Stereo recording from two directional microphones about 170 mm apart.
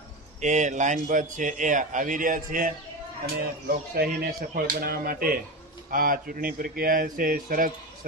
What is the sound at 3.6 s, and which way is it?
Speech, 65° right (ahead or behind).